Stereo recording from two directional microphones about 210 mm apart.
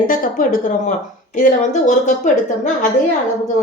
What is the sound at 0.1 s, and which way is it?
Speech, 40° left (ahead or behind).